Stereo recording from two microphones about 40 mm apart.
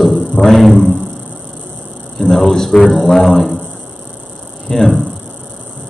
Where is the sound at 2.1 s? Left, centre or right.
Centre.